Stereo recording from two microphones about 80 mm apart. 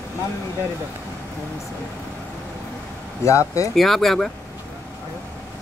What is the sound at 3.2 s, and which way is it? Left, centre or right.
Speech, left.